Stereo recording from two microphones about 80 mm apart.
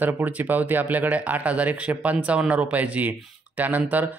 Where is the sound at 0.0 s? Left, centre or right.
Right.